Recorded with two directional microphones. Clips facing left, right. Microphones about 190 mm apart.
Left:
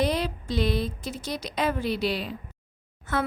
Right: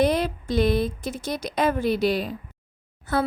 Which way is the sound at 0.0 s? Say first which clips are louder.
Right 4 dB; 50° right (ahead or behind).